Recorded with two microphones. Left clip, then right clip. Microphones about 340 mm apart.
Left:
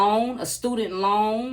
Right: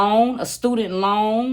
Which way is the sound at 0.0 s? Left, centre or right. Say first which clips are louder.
Right 4 dB; right.